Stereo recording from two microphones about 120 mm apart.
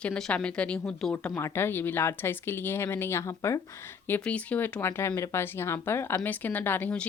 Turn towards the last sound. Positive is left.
turn(degrees=10)  # may be behind; listen again after turning